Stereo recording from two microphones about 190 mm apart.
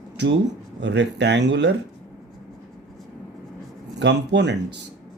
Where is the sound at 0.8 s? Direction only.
65° right (ahead or behind).